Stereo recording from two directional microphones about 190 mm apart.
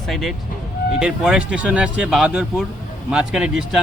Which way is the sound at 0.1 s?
Centre (ahead or behind).